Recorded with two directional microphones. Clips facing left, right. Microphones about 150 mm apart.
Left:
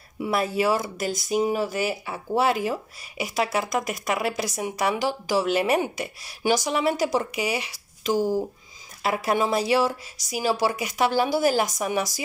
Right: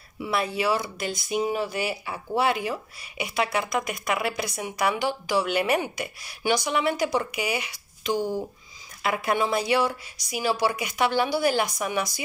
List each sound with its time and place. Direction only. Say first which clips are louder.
0.2 s speech: left 3 dB; 45° left (ahead or behind)